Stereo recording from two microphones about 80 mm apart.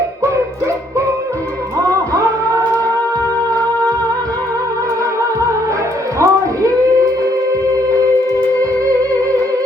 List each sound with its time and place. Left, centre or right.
1.9 s singing: right
6.1 s music: right